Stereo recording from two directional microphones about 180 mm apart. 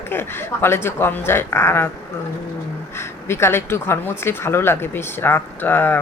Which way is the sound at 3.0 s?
15° left (ahead or behind).